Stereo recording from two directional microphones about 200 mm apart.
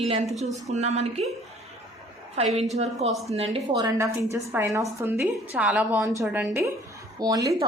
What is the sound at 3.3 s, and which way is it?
Speech, 30° right (ahead or behind).